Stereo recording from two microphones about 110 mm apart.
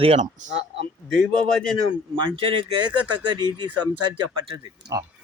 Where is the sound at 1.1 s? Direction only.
5° left (ahead or behind).